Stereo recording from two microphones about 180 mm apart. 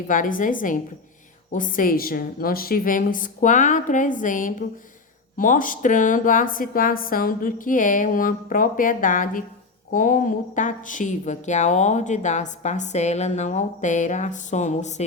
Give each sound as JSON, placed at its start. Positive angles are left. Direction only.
{"t": 0.1, "sound": "a woman's voice", "side_deg": 50}